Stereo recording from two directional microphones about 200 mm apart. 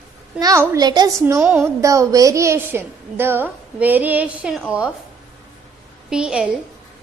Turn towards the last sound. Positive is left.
turn(degrees=-5)  # may be behind; listen again after turning